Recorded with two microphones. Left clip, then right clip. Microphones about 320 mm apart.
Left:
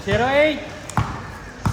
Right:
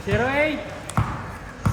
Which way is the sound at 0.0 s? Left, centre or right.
Left.